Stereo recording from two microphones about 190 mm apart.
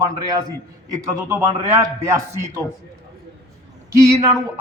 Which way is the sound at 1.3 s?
15° right (ahead or behind).